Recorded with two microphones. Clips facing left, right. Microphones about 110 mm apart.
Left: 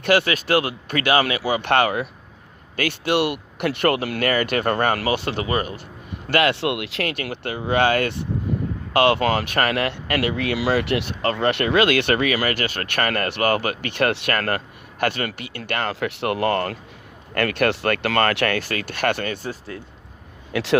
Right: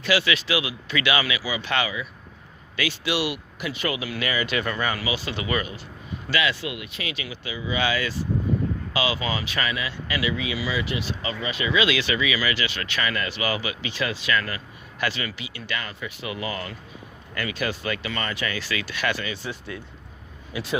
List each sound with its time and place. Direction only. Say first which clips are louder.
0.0 s speech: left 4 dB; 55° left (ahead or behind)
5.4 s speech: left 4 dB; 40° left (ahead or behind)
6.2 s speech: left 7 dB; 60° left (ahead or behind); by 7.1 s 80° left
7.1 s speech: left 6 dB; 60° left (ahead or behind); by 19.8 s 40° left (ahead or behind)
20.5 s speech: left 7 dB; 85° left